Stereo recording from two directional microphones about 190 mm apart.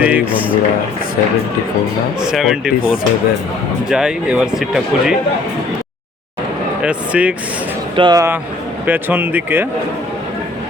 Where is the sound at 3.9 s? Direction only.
5° right (ahead or behind).